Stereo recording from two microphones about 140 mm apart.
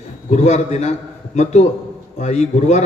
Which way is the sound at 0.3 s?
55° left (ahead or behind).